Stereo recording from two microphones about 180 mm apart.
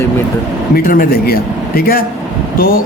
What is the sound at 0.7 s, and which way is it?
Speech, 50° left (ahead or behind).